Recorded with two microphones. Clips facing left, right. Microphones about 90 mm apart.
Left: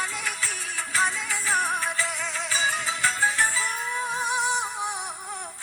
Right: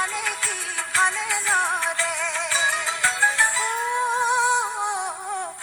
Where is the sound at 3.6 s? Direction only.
25° right (ahead or behind).